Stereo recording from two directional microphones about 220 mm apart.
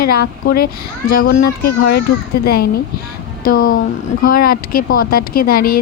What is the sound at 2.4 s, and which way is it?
Speech, 45° left (ahead or behind).